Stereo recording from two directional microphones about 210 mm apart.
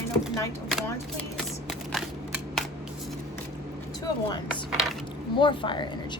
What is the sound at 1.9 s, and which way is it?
Scissors, centre (ahead or behind).